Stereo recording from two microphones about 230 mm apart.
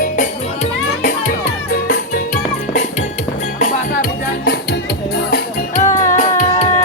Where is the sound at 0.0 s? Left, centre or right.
Left.